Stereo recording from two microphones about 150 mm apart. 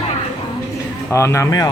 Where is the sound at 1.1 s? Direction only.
20° left (ahead or behind).